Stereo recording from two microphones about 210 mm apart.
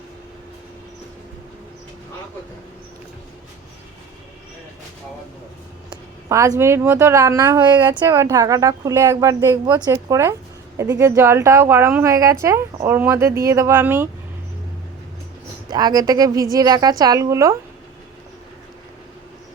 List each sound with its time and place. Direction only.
5.9 s a woman's voice: 15° right (ahead or behind)
15.7 s a woman's voice: 20° right (ahead or behind)